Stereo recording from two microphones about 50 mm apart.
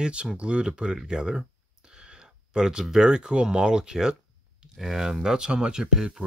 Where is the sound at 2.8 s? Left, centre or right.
Centre.